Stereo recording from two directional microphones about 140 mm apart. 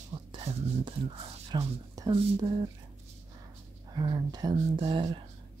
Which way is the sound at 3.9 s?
30° right (ahead or behind).